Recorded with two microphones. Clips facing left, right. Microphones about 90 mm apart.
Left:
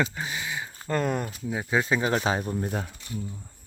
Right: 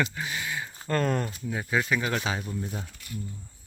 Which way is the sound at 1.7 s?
25° left (ahead or behind).